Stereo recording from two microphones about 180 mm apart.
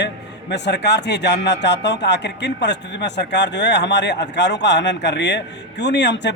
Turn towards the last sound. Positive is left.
turn(degrees=75)  # may be behind; listen again after turning